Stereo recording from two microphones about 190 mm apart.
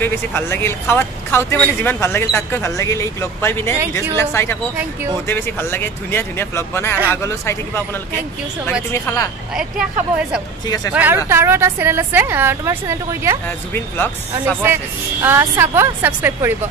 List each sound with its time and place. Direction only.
0.0 s a man's voice: 10° left (ahead or behind)
8.9 s a man's voice: 15° left (ahead or behind)
10.9 s a woman's voice: 10° right (ahead or behind)
13.9 s a man's voice: 10° left (ahead or behind)
15.2 s a woman's voice: 10° right (ahead or behind)